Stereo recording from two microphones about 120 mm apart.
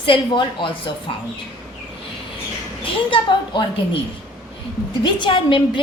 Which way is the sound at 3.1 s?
45° left (ahead or behind).